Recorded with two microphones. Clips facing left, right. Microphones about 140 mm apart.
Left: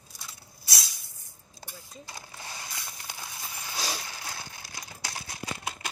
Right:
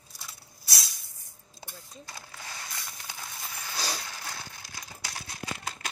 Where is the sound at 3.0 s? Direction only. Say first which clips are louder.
Even; 5° left (ahead or behind).